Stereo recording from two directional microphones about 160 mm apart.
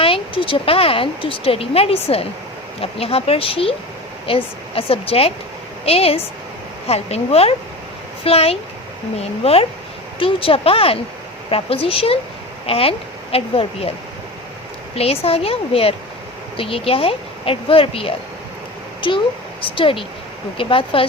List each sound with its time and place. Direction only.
0.0 s a woman's voice: 35° left (ahead or behind)
14.9 s a woman's voice: 40° left (ahead or behind)